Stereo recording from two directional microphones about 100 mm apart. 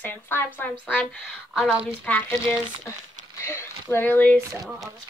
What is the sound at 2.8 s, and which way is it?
Speech, 30° left (ahead or behind).